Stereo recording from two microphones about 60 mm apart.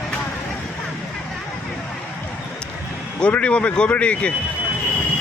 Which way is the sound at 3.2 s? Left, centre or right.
Left.